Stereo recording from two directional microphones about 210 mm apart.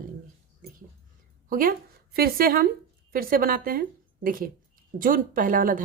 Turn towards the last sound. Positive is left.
turn(degrees=-40)  # may be behind; listen again after turning